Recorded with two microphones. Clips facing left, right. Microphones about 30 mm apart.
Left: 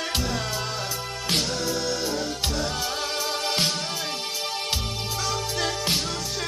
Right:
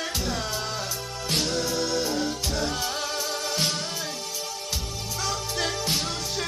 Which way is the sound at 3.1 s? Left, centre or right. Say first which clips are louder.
Left 2 dB; left.